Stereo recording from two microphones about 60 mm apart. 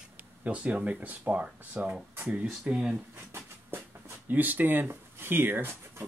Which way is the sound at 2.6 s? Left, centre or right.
Centre.